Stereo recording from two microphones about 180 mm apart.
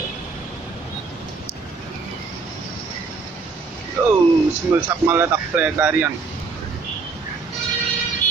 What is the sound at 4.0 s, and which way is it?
Speech, 10° right (ahead or behind).